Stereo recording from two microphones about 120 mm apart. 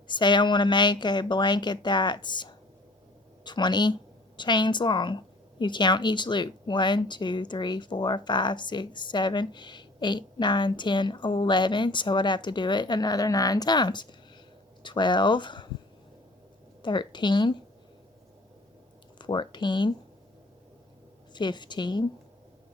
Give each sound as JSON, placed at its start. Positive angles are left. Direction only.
{"t": 0.1, "sound": "a woman's voice", "side_deg": 40}
{"t": 16.8, "sound": "a woman's voice", "side_deg": 40}
{"t": 19.2, "sound": "a woman's voice", "side_deg": 40}
{"t": 21.3, "sound": "a woman's voice", "side_deg": 40}